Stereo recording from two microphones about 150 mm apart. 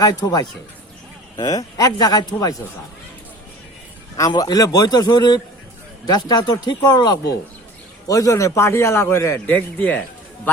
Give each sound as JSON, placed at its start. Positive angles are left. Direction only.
{"t": 0.0, "sound": "a man's voice", "side_deg": 25}
{"t": 4.2, "sound": "a man's voice", "side_deg": 25}